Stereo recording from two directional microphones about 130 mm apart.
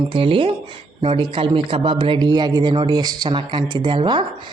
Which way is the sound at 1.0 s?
50° right (ahead or behind).